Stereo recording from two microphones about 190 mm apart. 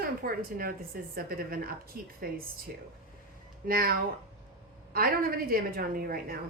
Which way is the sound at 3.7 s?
50° right (ahead or behind).